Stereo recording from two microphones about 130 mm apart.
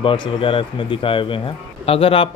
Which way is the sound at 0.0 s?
40° left (ahead or behind).